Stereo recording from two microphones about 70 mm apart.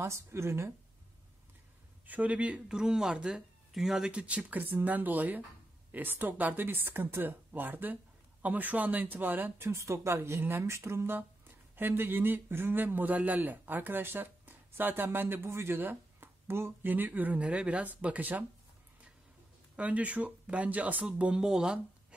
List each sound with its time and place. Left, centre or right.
0.0 s speech: right
2.0 s a man's voice: right
19.8 s a man's voice: centre